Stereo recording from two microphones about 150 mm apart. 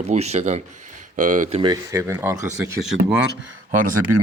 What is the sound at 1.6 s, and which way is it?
Speech, 25° right (ahead or behind).